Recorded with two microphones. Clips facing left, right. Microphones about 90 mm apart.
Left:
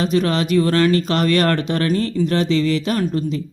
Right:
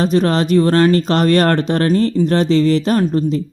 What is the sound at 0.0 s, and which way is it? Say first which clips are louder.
Speech: right 4 dB; 40° right (ahead or behind).